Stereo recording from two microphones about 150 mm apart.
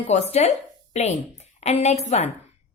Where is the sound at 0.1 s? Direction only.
45° left (ahead or behind).